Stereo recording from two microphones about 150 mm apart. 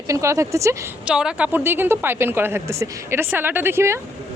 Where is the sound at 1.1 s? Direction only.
5° right (ahead or behind).